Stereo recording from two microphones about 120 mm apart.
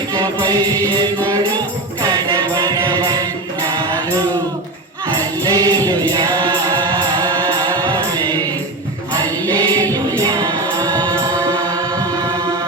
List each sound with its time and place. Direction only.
0.1 s music: 35° right (ahead or behind)
5.5 s music: 30° right (ahead or behind)
9.6 s music: 35° right (ahead or behind)